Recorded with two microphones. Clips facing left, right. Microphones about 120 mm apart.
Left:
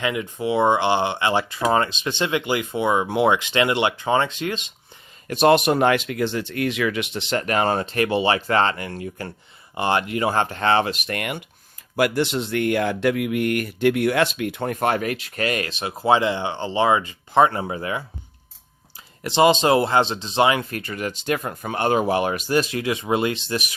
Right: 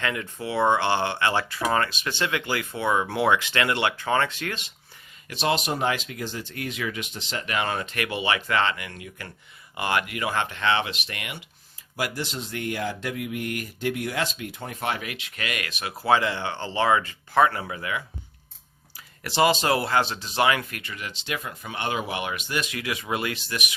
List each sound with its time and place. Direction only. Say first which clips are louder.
0.0 s speech: left 5 dB; 15° left (ahead or behind)
5.3 s speech: left 9 dB; 55° left (ahead or behind)
7.4 s speech: left 5 dB; 40° left (ahead or behind)
11.9 s speech: left 10 dB; 65° left (ahead or behind); by 23.7 s 30° left (ahead or behind)